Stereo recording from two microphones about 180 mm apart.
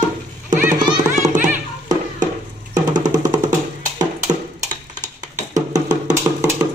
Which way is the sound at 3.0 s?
20° right (ahead or behind).